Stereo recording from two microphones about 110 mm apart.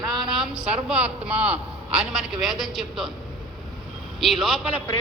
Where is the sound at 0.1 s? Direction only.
Centre (ahead or behind).